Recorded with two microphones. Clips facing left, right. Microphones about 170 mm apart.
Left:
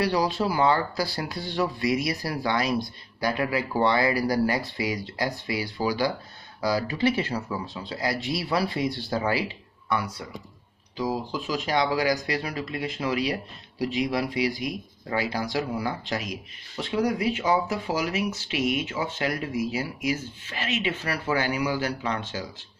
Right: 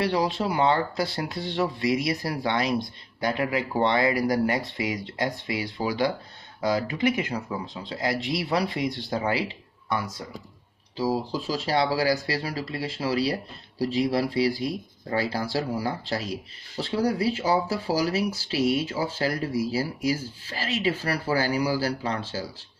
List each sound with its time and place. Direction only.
0.0 s speech: 25° right (ahead or behind)
9.8 s speech: 35° right (ahead or behind)
14.3 s speech: 15° left (ahead or behind)
15.0 s speech: 35° right (ahead or behind)